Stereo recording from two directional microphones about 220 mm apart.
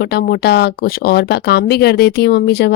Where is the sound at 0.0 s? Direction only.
45° left (ahead or behind).